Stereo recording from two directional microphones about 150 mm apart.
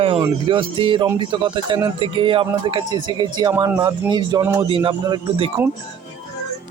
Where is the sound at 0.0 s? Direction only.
35° right (ahead or behind).